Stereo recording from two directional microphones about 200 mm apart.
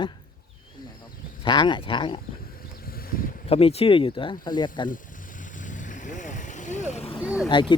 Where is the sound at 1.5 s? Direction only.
25° left (ahead or behind).